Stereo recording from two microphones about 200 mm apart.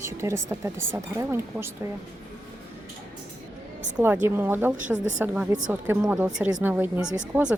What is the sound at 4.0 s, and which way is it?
Speech, 10° right (ahead or behind).